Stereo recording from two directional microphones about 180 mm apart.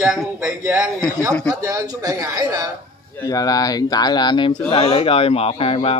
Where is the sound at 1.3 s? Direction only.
5° left (ahead or behind).